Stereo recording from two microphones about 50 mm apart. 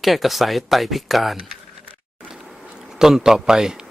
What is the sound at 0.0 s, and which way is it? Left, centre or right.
Speech, centre.